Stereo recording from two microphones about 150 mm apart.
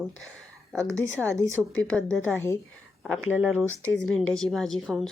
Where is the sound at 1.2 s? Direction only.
20° right (ahead or behind).